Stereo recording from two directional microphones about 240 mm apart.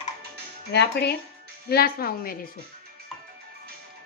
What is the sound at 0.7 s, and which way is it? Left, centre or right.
Speech, left.